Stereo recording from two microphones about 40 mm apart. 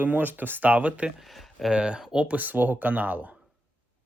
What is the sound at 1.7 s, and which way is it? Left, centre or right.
Speech, right.